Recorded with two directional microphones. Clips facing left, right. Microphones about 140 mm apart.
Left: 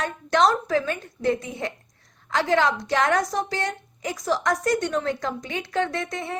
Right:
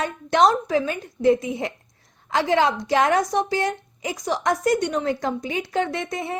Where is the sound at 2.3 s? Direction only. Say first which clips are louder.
Right 2 dB; 25° right (ahead or behind).